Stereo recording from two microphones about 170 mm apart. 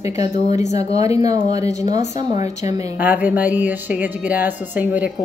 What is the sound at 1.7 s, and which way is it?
Speech, 40° left (ahead or behind).